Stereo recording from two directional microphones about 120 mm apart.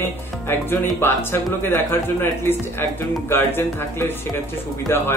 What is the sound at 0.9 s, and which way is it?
Speech, 20° left (ahead or behind).